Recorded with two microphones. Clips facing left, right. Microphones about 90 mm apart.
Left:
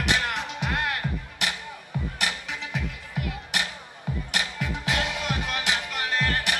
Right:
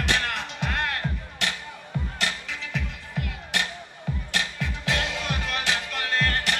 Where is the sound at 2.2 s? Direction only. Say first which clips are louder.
Even; 20° left (ahead or behind).